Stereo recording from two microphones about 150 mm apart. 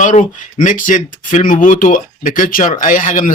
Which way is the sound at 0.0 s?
55° left (ahead or behind).